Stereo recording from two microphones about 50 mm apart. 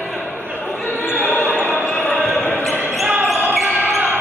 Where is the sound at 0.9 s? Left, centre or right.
Left.